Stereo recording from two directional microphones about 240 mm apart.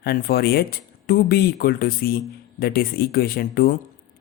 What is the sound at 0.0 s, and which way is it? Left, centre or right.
Speech, left.